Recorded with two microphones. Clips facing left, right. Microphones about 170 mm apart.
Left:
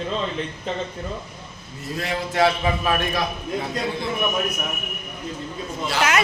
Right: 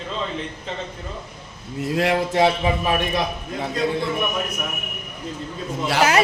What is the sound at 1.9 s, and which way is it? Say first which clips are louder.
Speech: right 7 dB; 85° right.